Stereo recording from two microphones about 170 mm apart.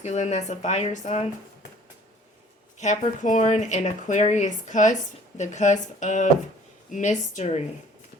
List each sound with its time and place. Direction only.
0.0 s speech: 45° left (ahead or behind)
2.7 s speech: 45° left (ahead or behind)